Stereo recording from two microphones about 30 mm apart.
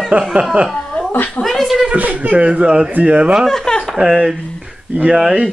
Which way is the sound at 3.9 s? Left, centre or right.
Centre.